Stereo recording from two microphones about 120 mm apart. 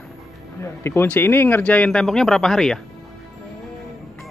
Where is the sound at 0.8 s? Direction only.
15° left (ahead or behind).